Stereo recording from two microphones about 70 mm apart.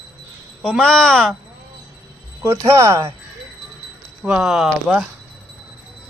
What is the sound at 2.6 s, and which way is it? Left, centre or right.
Speech, right.